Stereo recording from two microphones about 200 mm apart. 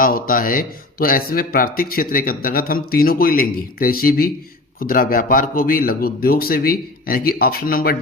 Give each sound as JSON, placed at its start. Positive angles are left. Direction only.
{"t": 0.0, "sound": "speech", "side_deg": 45}